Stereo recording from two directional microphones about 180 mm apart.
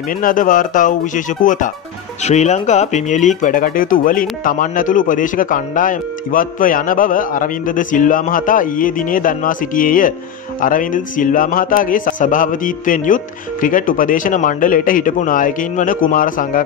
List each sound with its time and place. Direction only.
0.2 s speech: 50° left (ahead or behind)